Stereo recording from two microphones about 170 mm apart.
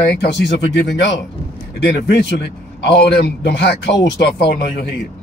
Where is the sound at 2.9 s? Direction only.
75° left (ahead or behind).